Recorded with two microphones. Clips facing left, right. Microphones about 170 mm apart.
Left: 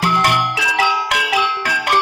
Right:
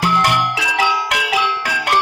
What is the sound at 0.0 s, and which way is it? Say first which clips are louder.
Music: even; centre (ahead or behind).